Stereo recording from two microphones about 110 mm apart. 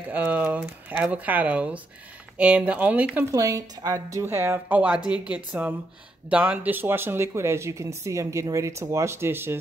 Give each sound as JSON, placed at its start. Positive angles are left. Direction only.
{"t": 0.0, "sound": "speech", "side_deg": -15}
{"t": 3.3, "sound": "a woman's voice", "side_deg": -30}
{"t": 4.3, "sound": "speech", "side_deg": -20}